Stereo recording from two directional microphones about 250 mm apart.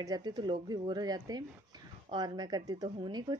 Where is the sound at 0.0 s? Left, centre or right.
Centre.